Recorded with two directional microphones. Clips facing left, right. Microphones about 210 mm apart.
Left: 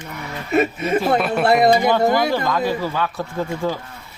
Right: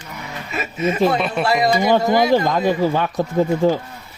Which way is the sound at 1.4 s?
60° left (ahead or behind).